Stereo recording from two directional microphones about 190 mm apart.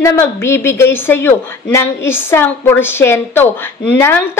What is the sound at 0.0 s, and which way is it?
A woman's voice, 15° left (ahead or behind).